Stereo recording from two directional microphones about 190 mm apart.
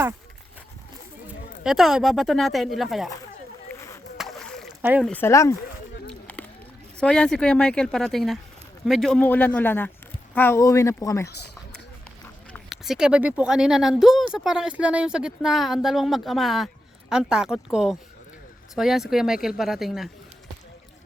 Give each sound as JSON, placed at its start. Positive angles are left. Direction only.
{"t": 1.3, "sound": "speech", "side_deg": 0}
{"t": 3.8, "sound": "a sound", "side_deg": 15}
{"t": 4.2, "sound": "a sound", "side_deg": 0}
{"t": 4.8, "sound": "speech", "side_deg": -10}
{"t": 5.0, "sound": "a man's voice", "side_deg": 10}
{"t": 6.1, "sound": "run", "side_deg": 10}
{"t": 7.0, "sound": "a man's voice", "side_deg": 5}
{"t": 12.5, "sound": "speech", "side_deg": 0}